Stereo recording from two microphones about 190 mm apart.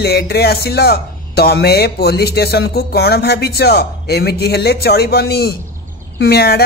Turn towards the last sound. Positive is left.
turn(degrees=55)  # may be behind; listen again after turning